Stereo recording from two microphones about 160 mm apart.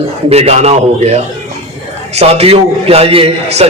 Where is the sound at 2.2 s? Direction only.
40° right (ahead or behind).